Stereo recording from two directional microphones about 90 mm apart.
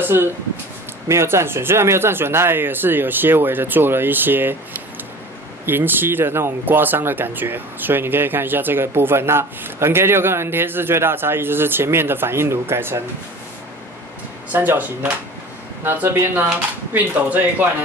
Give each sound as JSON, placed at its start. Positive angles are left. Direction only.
{"t": 0.0, "sound": "speech", "side_deg": -25}
{"t": 5.7, "sound": "speech", "side_deg": -20}
{"t": 14.5, "sound": "speech", "side_deg": -20}